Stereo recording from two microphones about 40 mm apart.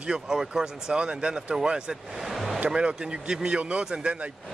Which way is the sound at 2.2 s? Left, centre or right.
Centre.